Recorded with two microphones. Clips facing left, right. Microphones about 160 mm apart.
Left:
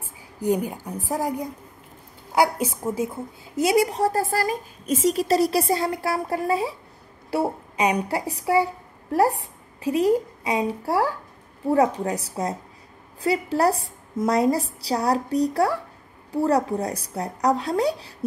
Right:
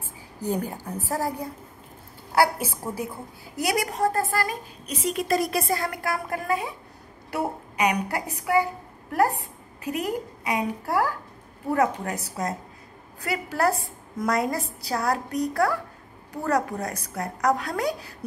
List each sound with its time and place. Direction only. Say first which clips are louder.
0.0 s a woman's voice: left 5 dB; 10° left (ahead or behind); by 8.6 s 30° left (ahead or behind)
9.8 s speech: left 8 dB; 30° left (ahead or behind)
13.2 s a woman's voice: left 4 dB; 30° left (ahead or behind)